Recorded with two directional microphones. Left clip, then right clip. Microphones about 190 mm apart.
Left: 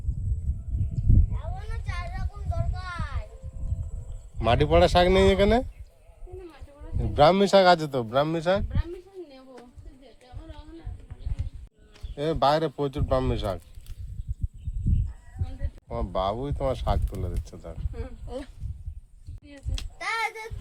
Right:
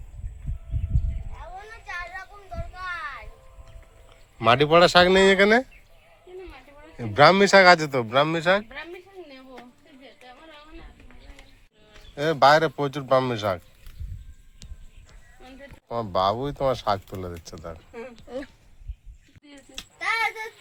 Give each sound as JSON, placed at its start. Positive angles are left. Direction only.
{"t": 4.4, "sound": "speech", "side_deg": -5}
{"t": 7.0, "sound": "speech", "side_deg": 0}
{"t": 12.1, "sound": "speech", "side_deg": 0}
{"t": 15.9, "sound": "speech", "side_deg": 0}